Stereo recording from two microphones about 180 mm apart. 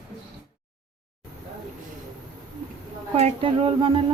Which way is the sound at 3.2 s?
35° right (ahead or behind).